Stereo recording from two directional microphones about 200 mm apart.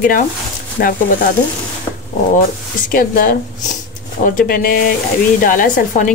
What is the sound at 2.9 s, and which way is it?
A woman's voice, 45° left (ahead or behind).